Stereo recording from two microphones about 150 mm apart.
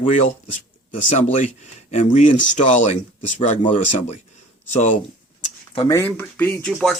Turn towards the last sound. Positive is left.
turn(degrees=0)  # may be behind; listen again after turning